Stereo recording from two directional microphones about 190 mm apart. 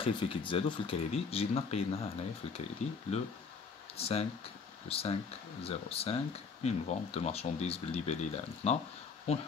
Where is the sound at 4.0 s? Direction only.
30° left (ahead or behind).